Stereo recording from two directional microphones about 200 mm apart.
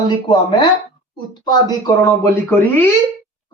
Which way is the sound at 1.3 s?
20° left (ahead or behind).